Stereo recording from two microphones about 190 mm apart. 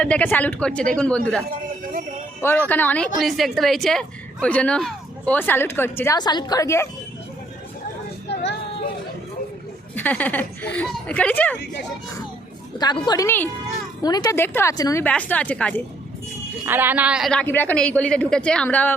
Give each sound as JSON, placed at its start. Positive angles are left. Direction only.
{"t": 0.0, "sound": "speech", "side_deg": 5}
{"t": 1.5, "sound": "speech", "side_deg": -45}
{"t": 2.4, "sound": "speech", "side_deg": 10}
{"t": 8.3, "sound": "a sound", "side_deg": 65}
{"t": 9.9, "sound": "speech", "side_deg": 10}
{"t": 11.5, "sound": "speech", "side_deg": 65}
{"t": 12.8, "sound": "speech", "side_deg": 20}
{"t": 16.6, "sound": "speech", "side_deg": -10}
{"t": 17.4, "sound": "speech", "side_deg": 10}